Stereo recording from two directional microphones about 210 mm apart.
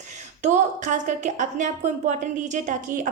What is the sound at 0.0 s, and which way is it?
A woman's voice, 35° right (ahead or behind).